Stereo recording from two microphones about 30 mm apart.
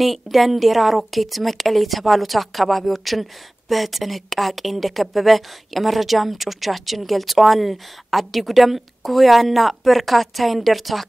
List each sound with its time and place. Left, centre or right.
0.0 s a woman's voice: centre